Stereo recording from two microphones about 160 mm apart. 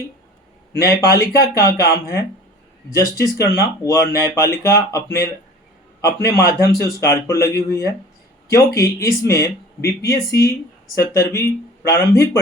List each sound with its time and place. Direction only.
0.8 s speech: 20° left (ahead or behind)
5.0 s speech: 80° left
6.0 s speech: 20° left (ahead or behind)